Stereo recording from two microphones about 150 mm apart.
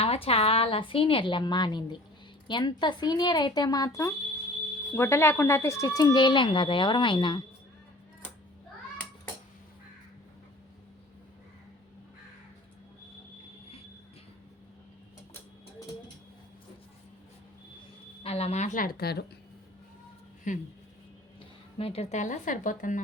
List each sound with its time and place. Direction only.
0.0 s a woman's voice: 40° left (ahead or behind)
18.2 s speech: 40° left (ahead or behind); by 19.2 s 90° left
20.5 s a woman's voice: 60° left (ahead or behind)
21.8 s a woman's voice: 40° left (ahead or behind); by 23.0 s 60° left (ahead or behind)